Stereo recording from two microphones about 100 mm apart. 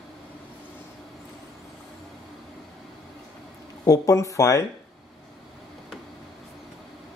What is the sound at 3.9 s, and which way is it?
Speech, 35° left (ahead or behind).